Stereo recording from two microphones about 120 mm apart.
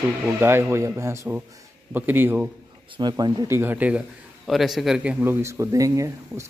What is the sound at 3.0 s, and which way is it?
Speech, 35° right (ahead or behind).